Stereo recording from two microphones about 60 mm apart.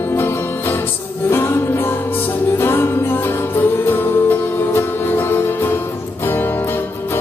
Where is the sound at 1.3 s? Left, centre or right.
Left.